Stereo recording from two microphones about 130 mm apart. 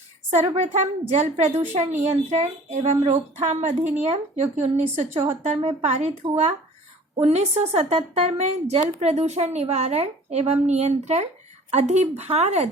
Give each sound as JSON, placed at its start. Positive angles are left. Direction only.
{"t": 0.4, "sound": "speech", "side_deg": -55}
{"t": 7.2, "sound": "speech", "side_deg": -55}